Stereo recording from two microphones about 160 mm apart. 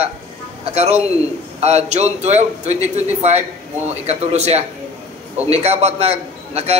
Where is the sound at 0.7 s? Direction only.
40° right (ahead or behind).